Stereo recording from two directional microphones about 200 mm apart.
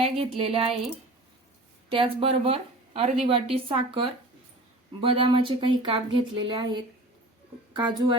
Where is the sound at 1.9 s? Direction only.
25° right (ahead or behind).